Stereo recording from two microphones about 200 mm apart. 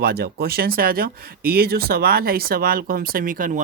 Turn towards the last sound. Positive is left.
turn(degrees=-40)  # may be behind; listen again after turning